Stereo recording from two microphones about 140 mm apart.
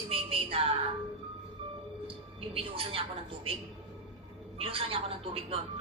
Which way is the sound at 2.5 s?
40° right (ahead or behind).